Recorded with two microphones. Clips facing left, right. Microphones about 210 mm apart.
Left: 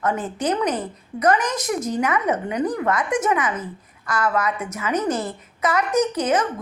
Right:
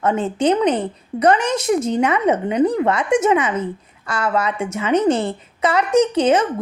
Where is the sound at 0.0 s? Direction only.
25° right (ahead or behind).